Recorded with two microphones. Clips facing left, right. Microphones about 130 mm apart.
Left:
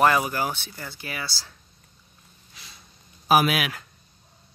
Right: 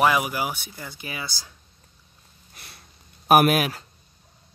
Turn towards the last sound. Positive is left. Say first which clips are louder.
# right 3 dB
turn(degrees=-30)  # may be behind; listen again after turning